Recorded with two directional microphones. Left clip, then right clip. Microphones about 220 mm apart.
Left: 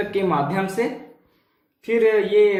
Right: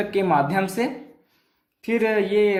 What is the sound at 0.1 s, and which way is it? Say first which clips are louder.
Speech: right 4 dB; 50° right (ahead or behind).